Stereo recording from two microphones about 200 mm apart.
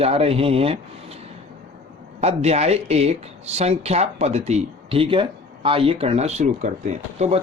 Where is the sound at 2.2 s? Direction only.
30° right (ahead or behind).